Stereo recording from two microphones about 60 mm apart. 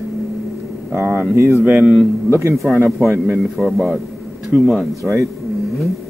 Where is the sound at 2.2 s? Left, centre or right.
Right.